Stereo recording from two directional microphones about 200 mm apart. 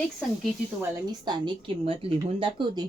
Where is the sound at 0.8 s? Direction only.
20° right (ahead or behind).